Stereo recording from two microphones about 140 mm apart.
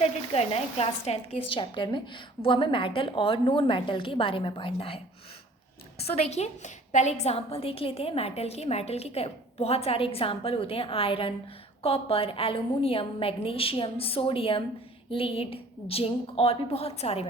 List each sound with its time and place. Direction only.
0.0 s a woman's voice: 45° left (ahead or behind)
6.0 s a woman's voice: 50° left (ahead or behind)